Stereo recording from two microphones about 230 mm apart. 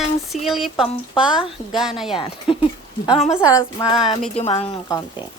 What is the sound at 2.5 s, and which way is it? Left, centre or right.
Speech, left.